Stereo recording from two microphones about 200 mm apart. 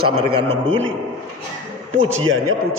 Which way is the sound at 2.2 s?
90° right.